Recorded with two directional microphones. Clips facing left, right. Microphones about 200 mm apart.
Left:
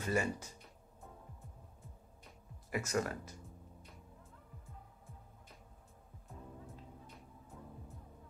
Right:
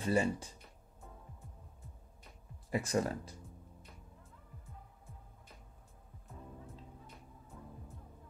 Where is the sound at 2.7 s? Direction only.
30° right (ahead or behind).